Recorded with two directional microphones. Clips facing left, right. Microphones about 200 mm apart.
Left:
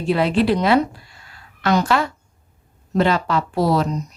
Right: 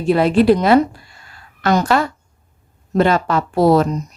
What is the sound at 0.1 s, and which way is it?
Speech, 45° right (ahead or behind).